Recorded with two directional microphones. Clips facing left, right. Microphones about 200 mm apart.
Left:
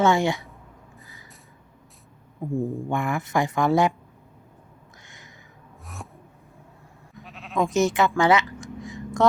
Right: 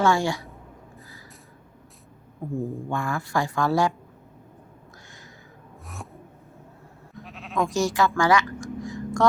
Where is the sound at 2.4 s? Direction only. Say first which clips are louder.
Left 3 dB; 10° left (ahead or behind).